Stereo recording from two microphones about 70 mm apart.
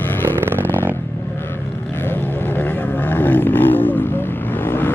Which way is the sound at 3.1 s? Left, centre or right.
Left.